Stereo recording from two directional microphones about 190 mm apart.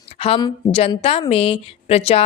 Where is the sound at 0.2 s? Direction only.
25° left (ahead or behind).